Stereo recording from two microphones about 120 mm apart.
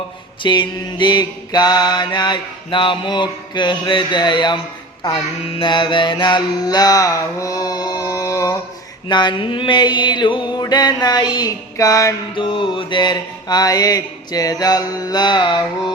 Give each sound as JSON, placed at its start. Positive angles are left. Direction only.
{"t": 0.4, "sound": "mantra", "side_deg": 40}
{"t": 9.0, "sound": "mantra", "side_deg": 40}
{"t": 12.3, "sound": "mantra", "side_deg": 45}